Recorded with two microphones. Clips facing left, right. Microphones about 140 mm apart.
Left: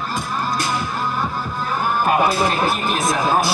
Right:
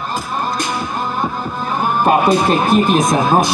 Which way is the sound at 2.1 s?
20° right (ahead or behind).